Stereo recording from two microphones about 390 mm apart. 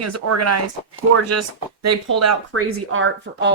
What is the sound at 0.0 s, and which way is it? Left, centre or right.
Speech, right.